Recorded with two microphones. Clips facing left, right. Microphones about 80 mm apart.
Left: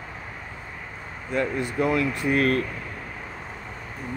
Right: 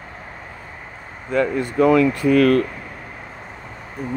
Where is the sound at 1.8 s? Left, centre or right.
Right.